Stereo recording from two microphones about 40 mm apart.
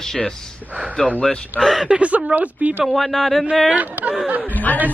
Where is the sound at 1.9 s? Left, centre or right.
Right.